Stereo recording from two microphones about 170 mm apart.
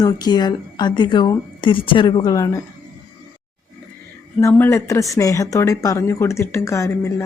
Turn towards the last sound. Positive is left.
turn(degrees=15)  # may be behind; listen again after turning